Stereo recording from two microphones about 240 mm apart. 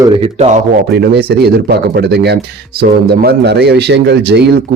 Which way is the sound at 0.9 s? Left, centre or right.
Right.